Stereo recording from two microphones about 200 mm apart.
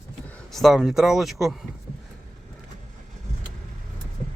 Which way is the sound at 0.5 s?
Centre (ahead or behind).